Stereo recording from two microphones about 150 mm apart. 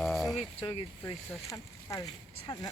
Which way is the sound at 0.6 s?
35° left (ahead or behind).